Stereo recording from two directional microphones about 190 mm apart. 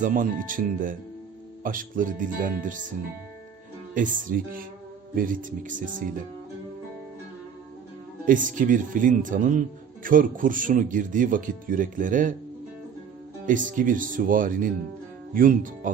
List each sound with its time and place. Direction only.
0.0 s speech: 45° right (ahead or behind)
3.9 s speech: 45° right (ahead or behind)
8.2 s speech: 45° right (ahead or behind)
13.4 s speech: 45° right (ahead or behind)